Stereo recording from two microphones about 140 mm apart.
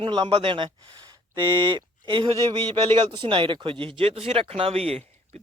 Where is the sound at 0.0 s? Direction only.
40° right (ahead or behind).